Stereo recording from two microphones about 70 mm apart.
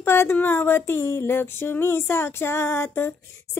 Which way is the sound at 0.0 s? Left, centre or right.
Left.